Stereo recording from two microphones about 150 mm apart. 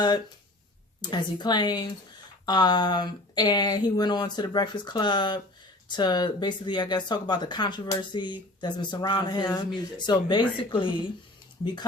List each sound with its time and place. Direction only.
1.0 s speech: 30° left (ahead or behind)